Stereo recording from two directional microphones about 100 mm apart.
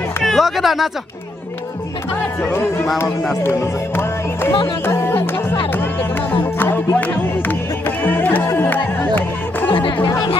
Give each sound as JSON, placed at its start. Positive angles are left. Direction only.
{"t": 0.2, "sound": "a sound", "side_deg": 0}
{"t": 2.5, "sound": "music", "side_deg": 25}
{"t": 6.6, "sound": "music", "side_deg": 20}
{"t": 9.7, "sound": "music", "side_deg": 60}
{"t": 10.0, "sound": "chatter", "side_deg": 45}